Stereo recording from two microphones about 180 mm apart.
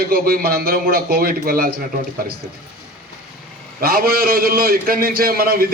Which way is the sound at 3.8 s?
55° right (ahead or behind).